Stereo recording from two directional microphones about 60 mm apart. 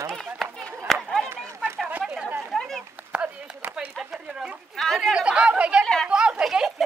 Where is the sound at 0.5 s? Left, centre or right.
Centre.